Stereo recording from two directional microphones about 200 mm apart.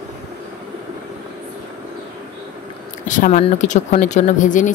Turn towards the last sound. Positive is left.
turn(degrees=40)  # may be behind; listen again after turning